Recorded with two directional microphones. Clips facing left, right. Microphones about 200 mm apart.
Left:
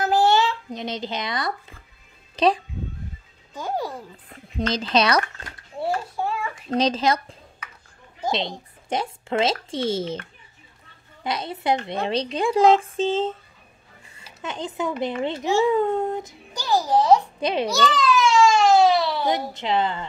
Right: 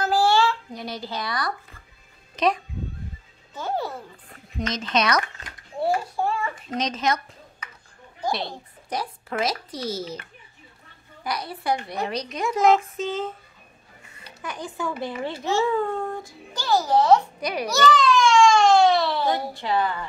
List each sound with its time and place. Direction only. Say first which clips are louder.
0.0 s a sound: left 1 dB; 20° left (ahead or behind)
2.3 s a child's voice: left 3 dB; 30° left (ahead or behind)
3.5 s a child's voice: even; 15° left (ahead or behind)
4.6 s speech: left 3 dB; 30° left (ahead or behind)
5.8 s a child's voice: right 2 dB; centre (ahead or behind)
6.7 s speech: left 5 dB; 30° left (ahead or behind)
8.3 s speech: left 2 dB; 20° left (ahead or behind)
11.2 s speech: left 3 dB; 25° left (ahead or behind)
14.4 s a child's voice: left 3 dB; 25° left (ahead or behind)
17.4 s speech: left 2 dB; 25° left (ahead or behind)
17.9 s baby cry: even; 5° left (ahead or behind)
19.2 s speech: left 1 dB; 20° left (ahead or behind)